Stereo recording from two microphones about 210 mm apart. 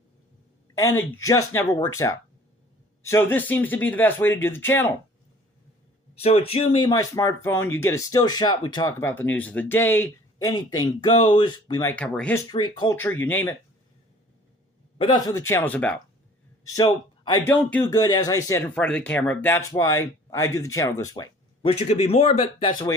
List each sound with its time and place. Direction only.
0.9 s speech: 10° left (ahead or behind)
3.0 s speech: 10° left (ahead or behind)
6.1 s speech: 30° left (ahead or behind); by 12.4 s 5° left (ahead or behind)
12.5 s speech: 20° left (ahead or behind)
13.0 s speech: 10° left (ahead or behind)
14.9 s a man's voice: 25° left (ahead or behind)
15.3 s speech: 10° left (ahead or behind)
16.7 s a man's voice: 20° left (ahead or behind)
17.5 s speech: 5° left (ahead or behind)
17.9 s speech: 15° left (ahead or behind)